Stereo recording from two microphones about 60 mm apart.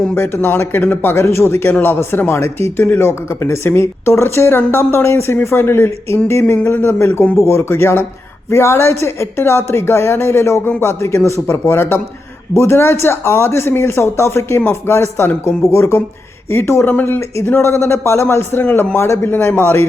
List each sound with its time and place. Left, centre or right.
0.1 s speech: left
1.1 s speech: left
16.5 s speech: left
19.2 s speech: left
19.5 s speech: left